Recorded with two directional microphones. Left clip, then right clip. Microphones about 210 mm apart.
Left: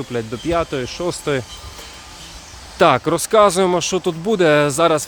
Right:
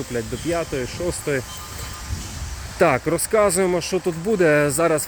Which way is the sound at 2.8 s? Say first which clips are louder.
Left 4 dB; 15° left (ahead or behind).